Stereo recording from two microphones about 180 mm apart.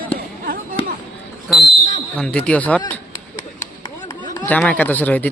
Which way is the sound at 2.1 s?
5° left (ahead or behind).